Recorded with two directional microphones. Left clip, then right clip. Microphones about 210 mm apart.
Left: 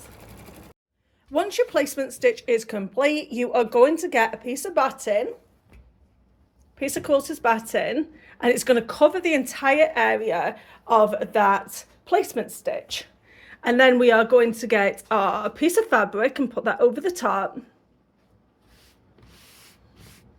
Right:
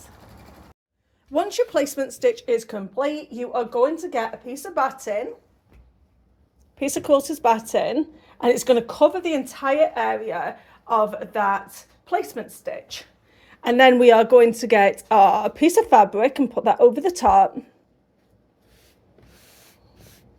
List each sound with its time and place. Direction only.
1.3 s speech: 5° left (ahead or behind)
3.0 s a woman's voice: 25° left (ahead or behind)
6.7 s a woman's voice: 5° right (ahead or behind); by 13.1 s 20° left (ahead or behind)
13.3 s a woman's voice: 5° left (ahead or behind); by 17.7 s 10° right (ahead or behind)